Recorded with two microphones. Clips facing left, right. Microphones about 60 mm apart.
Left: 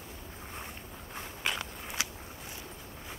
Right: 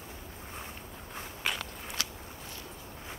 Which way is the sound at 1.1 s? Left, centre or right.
Centre.